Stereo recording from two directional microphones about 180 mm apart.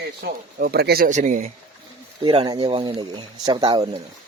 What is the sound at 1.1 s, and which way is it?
Speech, 45° right (ahead or behind).